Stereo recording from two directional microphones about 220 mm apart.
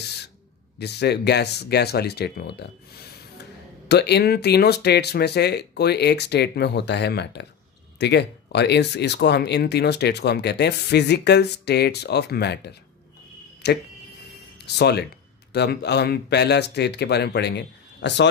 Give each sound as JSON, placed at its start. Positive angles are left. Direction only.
{"t": 0.7, "sound": "speech", "side_deg": 50}
{"t": 3.9, "sound": "speech", "side_deg": 50}